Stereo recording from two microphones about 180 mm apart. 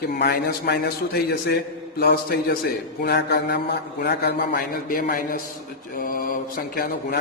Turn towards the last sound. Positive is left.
turn(degrees=55)  # may be behind; listen again after turning